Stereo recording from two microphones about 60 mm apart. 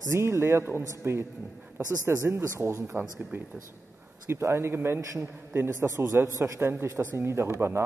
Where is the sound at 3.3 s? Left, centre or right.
Right.